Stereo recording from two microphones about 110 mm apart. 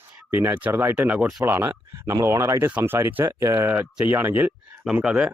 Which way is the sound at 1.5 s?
25° right (ahead or behind).